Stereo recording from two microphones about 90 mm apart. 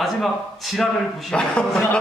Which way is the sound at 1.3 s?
10° left (ahead or behind).